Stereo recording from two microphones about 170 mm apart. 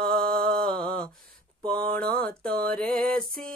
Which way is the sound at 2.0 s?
60° right (ahead or behind).